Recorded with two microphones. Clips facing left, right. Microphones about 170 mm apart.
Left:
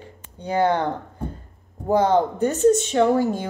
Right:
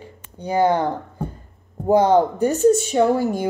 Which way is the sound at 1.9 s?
15° right (ahead or behind).